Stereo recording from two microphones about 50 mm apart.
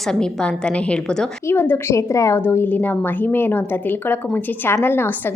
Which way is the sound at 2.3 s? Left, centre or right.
Left.